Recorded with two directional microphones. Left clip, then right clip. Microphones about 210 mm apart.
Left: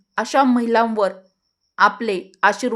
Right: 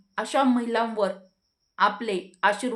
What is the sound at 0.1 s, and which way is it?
A woman's voice, 40° left (ahead or behind).